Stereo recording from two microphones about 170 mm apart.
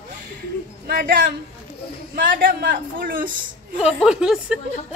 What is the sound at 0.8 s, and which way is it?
A man's voice, 55° right (ahead or behind).